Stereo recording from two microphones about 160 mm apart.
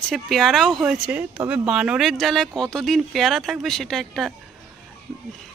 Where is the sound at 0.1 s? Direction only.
Centre (ahead or behind).